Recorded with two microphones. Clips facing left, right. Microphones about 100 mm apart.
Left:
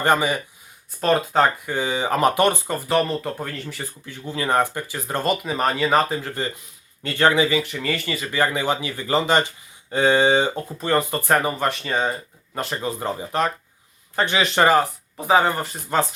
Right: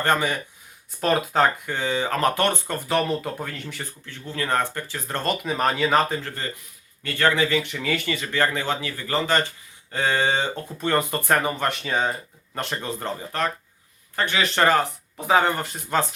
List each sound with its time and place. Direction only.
0.0 s speech: 10° left (ahead or behind)
1.0 s speech: centre (ahead or behind)
4.0 s speech: 15° left (ahead or behind)
10.8 s speech: centre (ahead or behind)